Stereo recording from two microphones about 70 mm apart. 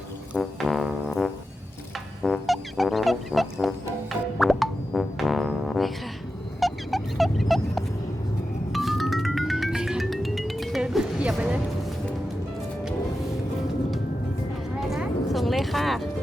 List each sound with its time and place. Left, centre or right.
0.3 s brass instrument: centre
2.2 s music: centre
6.6 s a sound: centre
8.7 s music: centre
11.2 s music: centre
14.8 s a sound: centre